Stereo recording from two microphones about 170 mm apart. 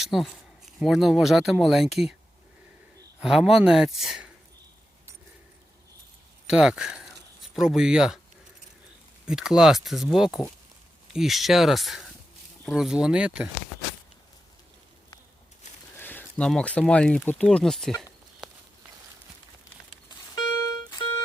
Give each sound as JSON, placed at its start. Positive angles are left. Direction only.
{"t": 0.0, "sound": "speech", "side_deg": 0}
{"t": 3.2, "sound": "speech", "side_deg": -5}
{"t": 6.5, "sound": "speech", "side_deg": -5}
{"t": 9.2, "sound": "speech", "side_deg": -5}
{"t": 16.0, "sound": "speech", "side_deg": 10}
{"t": 20.1, "sound": "a sound", "side_deg": 20}